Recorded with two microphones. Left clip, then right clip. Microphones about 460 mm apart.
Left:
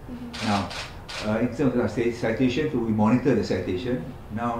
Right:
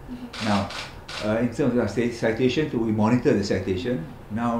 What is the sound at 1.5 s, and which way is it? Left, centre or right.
Speech, right.